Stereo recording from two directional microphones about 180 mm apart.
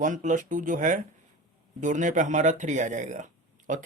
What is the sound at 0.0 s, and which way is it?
Speech, 45° right (ahead or behind).